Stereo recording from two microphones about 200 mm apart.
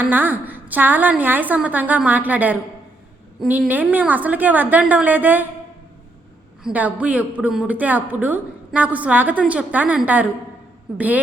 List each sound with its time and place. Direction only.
0.0 s a man's voice: 10° right (ahead or behind)
6.6 s a man's voice: 5° right (ahead or behind)